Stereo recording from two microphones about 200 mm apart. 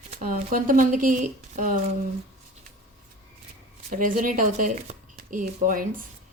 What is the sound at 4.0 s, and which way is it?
A woman's voice, 45° right (ahead or behind).